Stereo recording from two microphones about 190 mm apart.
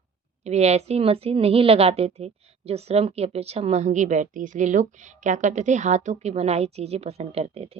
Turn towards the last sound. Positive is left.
turn(degrees=-30)  # may be behind; listen again after turning